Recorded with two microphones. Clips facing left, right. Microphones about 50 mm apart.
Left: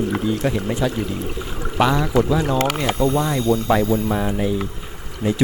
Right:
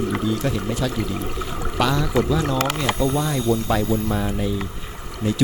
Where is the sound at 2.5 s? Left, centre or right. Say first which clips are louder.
Left 2 dB; left.